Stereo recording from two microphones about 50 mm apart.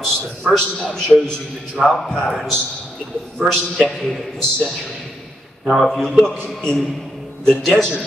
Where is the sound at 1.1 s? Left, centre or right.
Centre.